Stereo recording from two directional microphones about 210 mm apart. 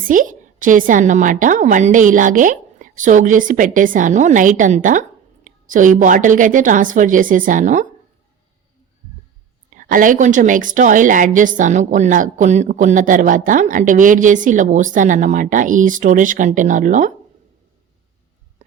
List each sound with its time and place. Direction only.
0.1 s a woman's voice: 40° right (ahead or behind)
9.6 s a woman's voice: 40° right (ahead or behind)